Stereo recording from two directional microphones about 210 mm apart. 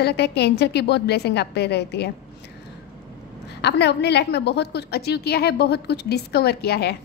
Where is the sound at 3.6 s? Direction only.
55° left (ahead or behind).